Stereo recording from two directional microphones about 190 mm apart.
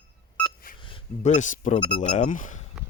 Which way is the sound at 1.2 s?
40° left (ahead or behind).